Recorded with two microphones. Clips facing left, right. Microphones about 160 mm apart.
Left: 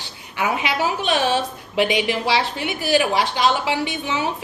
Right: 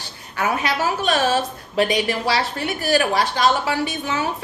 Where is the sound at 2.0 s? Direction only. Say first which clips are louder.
Left 1 dB; 40° right (ahead or behind).